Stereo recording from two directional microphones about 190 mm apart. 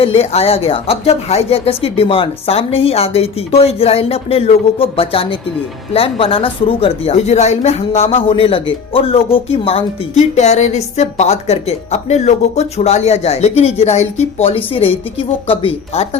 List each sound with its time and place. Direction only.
0.0 s speech: 30° left (ahead or behind)